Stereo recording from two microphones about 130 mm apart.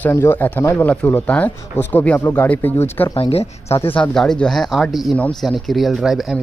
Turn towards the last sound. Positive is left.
turn(degrees=0)  # may be behind; listen again after turning